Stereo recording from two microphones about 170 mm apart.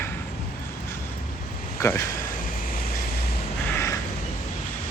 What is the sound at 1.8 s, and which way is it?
Speech, 15° left (ahead or behind).